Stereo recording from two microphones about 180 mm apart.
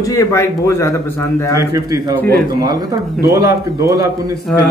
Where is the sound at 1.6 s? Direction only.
20° right (ahead or behind).